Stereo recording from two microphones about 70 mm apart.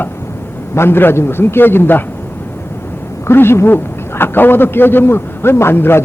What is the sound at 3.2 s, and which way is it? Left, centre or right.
Speech, left.